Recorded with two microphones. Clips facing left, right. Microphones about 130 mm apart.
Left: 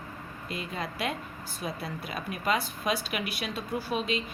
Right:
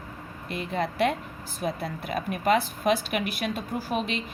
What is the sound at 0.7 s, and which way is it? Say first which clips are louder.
Speech: right 9 dB; 55° right (ahead or behind).